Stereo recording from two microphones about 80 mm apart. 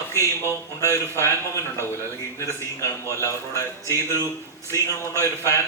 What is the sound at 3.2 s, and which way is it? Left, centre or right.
Speech, left.